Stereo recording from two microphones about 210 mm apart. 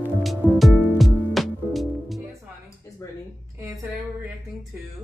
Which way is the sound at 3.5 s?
15° right (ahead or behind).